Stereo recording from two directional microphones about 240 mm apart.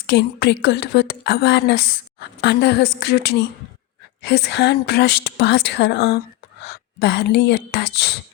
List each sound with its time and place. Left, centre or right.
0.1 s a woman's voice: left